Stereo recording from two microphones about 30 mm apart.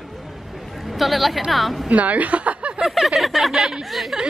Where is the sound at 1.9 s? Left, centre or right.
Right.